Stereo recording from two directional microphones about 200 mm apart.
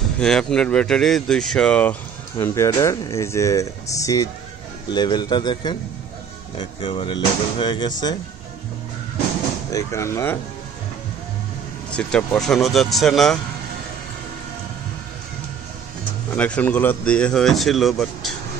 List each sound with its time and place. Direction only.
0.2 s speech: 5° left (ahead or behind); by 8.2 s 20° left (ahead or behind)
9.7 s speech: 15° left (ahead or behind)
11.9 s speech: 5° left (ahead or behind)
16.3 s speech: 5° left (ahead or behind)